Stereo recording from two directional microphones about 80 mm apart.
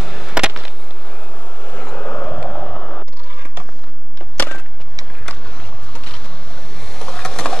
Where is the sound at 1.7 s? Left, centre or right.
Left.